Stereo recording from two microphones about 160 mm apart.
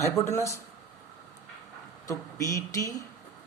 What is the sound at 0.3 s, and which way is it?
Speech, 20° left (ahead or behind).